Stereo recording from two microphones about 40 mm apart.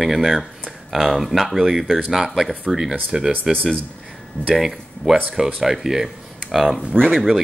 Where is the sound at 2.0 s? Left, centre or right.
Centre.